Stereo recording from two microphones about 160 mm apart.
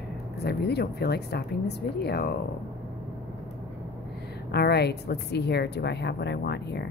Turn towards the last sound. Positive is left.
turn(degrees=90)